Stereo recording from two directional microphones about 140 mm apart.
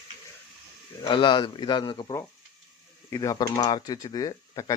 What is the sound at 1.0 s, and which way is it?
Speech, 35° left (ahead or behind).